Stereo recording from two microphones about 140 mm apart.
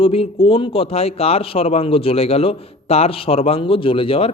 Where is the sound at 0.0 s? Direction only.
45° left (ahead or behind).